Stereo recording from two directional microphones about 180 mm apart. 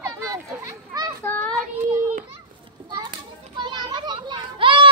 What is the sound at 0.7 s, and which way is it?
Children playing, 20° right (ahead or behind).